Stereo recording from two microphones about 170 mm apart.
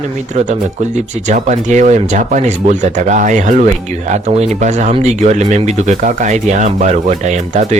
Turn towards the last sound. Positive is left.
turn(degrees=-40)  # may be behind; listen again after turning